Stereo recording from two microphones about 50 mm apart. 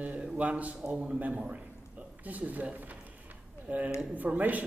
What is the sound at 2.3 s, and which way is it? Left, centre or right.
Mantra, right.